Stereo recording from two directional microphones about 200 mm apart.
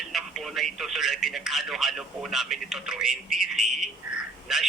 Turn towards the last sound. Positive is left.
turn(degrees=0)  # may be behind; listen again after turning